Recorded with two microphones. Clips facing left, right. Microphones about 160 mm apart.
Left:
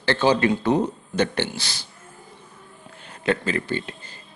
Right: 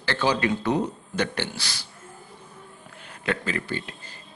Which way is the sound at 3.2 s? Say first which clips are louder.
Left 5 dB; 30° left (ahead or behind).